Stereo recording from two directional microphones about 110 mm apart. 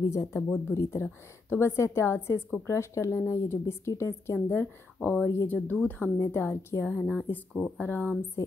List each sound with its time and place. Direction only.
0.1 s a woman's voice: 25° left (ahead or behind)
0.4 s a woman's voice: 15° left (ahead or behind)
6.1 s a woman's voice: 25° left (ahead or behind)